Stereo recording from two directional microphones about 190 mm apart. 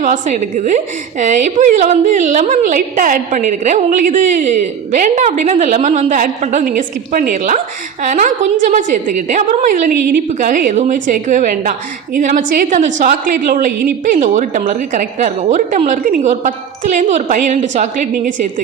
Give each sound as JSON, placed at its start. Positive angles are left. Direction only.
{"t": 0.0, "sound": "a woman's voice", "side_deg": -40}